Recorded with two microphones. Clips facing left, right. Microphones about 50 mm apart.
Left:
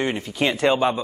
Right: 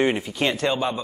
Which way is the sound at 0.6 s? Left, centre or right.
Centre.